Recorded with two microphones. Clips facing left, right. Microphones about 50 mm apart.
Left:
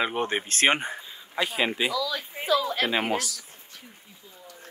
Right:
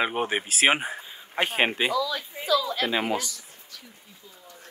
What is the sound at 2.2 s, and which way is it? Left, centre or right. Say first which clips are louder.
Speech: even; left.